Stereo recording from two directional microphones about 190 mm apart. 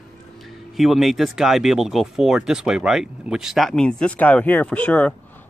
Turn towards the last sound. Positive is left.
turn(degrees=5)  # may be behind; listen again after turning